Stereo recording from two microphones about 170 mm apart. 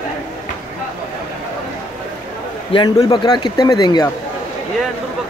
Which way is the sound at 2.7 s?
25° left (ahead or behind).